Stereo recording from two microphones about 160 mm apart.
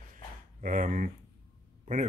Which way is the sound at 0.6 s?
55° right (ahead or behind).